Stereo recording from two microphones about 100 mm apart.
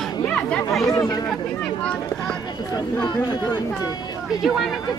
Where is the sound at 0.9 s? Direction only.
40° left (ahead or behind).